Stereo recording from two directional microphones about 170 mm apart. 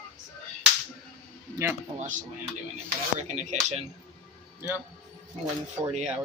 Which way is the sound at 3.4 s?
45° right (ahead or behind).